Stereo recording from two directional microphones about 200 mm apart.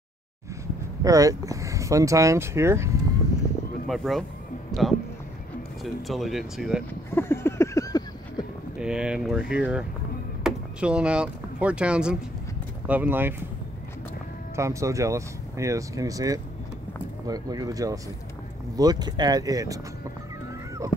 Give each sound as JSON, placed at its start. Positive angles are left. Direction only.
{"t": 1.0, "sound": "speech", "side_deg": -15}
{"t": 3.8, "sound": "speech", "side_deg": 0}
{"t": 6.0, "sound": "speech", "side_deg": 0}
{"t": 7.1, "sound": "a sound", "side_deg": 10}
{"t": 8.7, "sound": "speech", "side_deg": -5}
{"t": 14.5, "sound": "speech", "side_deg": -15}